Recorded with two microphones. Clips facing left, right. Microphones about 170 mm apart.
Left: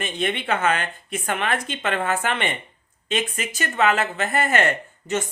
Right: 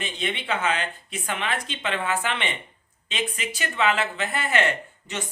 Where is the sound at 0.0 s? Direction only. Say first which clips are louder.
Left 5 dB; 50° left (ahead or behind).